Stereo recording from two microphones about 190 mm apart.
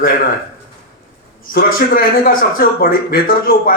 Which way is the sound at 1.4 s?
50° left (ahead or behind).